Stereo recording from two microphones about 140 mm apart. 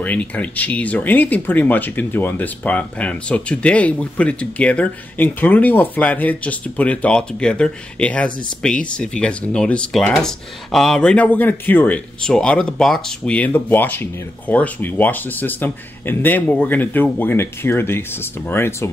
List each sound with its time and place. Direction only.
0.0 s speech: 10° left (ahead or behind)